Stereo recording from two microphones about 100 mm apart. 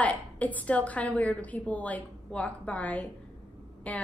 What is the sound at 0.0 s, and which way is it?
A woman's voice, 15° left (ahead or behind).